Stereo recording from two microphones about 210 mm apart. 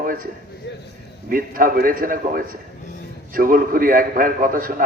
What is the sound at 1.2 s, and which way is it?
A man's voice, 40° right (ahead or behind).